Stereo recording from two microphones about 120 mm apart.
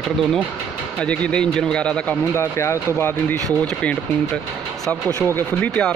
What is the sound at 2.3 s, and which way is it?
Speech, 20° left (ahead or behind).